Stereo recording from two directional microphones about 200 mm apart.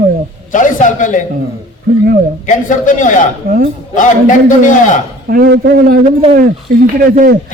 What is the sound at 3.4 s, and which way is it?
Speech, 45° right (ahead or behind).